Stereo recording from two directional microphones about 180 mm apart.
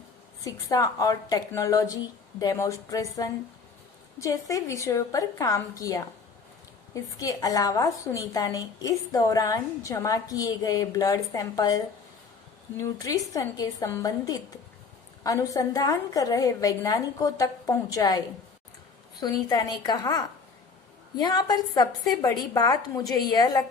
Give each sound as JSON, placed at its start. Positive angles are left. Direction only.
{"t": 0.4, "sound": "a woman's voice", "side_deg": 20}
{"t": 12.8, "sound": "a woman's voice", "side_deg": 20}
{"t": 19.2, "sound": "a woman's voice", "side_deg": 20}